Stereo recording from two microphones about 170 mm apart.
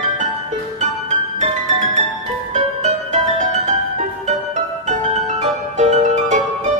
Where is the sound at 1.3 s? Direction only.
45° right (ahead or behind).